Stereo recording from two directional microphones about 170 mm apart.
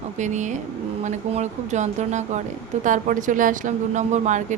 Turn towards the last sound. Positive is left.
turn(degrees=-45)  # may be behind; listen again after turning